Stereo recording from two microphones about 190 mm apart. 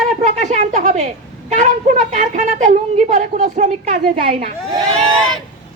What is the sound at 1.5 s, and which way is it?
A woman's voice, 40° right (ahead or behind).